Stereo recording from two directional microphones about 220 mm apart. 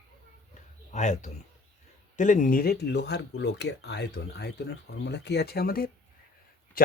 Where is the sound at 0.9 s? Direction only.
30° left (ahead or behind).